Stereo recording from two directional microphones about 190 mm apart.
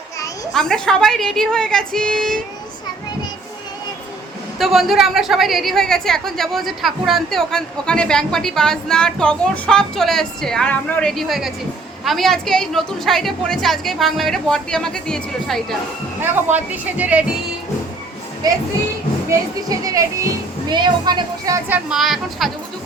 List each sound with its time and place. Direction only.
0.5 s a woman's voice: 5° left (ahead or behind)
4.5 s a woman's voice: centre (ahead or behind)
16.2 s speech: 10° right (ahead or behind)
19.3 s speech: 20° right (ahead or behind)
21.8 s a woman's voice: centre (ahead or behind)